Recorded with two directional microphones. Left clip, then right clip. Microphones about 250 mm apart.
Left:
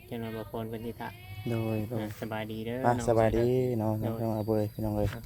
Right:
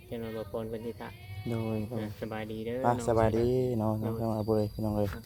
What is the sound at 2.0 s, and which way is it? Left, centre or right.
Speech, left.